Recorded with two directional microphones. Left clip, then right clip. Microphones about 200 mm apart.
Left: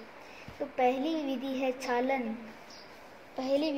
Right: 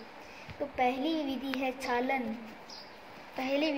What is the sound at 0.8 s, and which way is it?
A woman's voice, 5° right (ahead or behind).